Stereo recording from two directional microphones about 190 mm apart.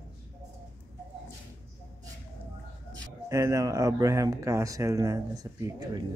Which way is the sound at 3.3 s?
15° right (ahead or behind).